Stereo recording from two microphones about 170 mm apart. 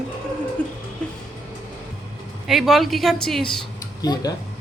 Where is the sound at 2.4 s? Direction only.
Centre (ahead or behind).